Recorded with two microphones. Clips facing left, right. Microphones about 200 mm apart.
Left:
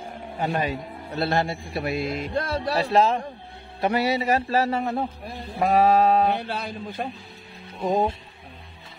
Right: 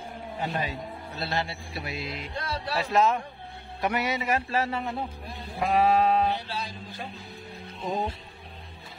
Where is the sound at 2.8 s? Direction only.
35° left (ahead or behind).